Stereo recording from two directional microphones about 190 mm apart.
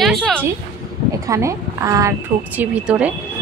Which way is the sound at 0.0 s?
Centre (ahead or behind).